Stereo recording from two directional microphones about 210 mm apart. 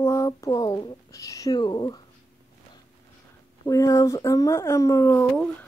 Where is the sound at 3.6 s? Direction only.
15° left (ahead or behind).